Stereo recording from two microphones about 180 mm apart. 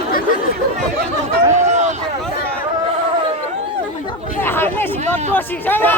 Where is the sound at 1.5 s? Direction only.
40° right (ahead or behind).